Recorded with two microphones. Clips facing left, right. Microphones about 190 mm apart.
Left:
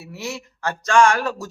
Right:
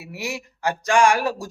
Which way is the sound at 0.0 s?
15° right (ahead or behind).